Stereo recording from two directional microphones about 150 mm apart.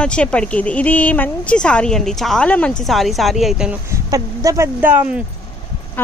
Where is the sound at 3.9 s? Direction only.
20° right (ahead or behind).